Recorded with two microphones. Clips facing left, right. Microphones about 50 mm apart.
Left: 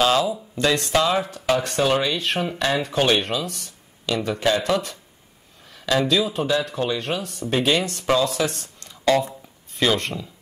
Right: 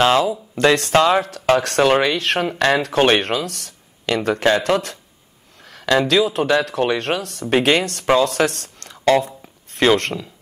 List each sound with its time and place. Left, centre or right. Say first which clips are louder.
0.0 s speech: right 4 dB; right
0.7 s speech: right 5 dB; right